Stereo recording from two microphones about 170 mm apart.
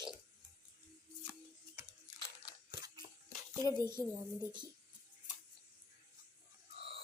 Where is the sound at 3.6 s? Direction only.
25° right (ahead or behind).